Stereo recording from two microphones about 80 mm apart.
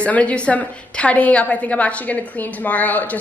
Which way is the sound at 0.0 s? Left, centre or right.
Centre.